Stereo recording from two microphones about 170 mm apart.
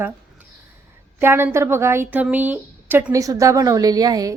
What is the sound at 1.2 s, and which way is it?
A woman's voice, 15° right (ahead or behind).